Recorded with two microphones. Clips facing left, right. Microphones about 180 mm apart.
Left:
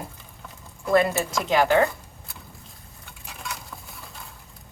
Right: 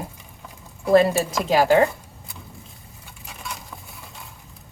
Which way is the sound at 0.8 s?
30° right (ahead or behind).